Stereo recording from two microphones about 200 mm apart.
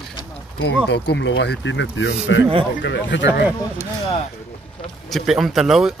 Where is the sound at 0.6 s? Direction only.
60° left (ahead or behind).